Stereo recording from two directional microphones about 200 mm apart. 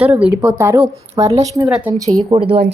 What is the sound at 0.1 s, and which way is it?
Speech, 5° right (ahead or behind).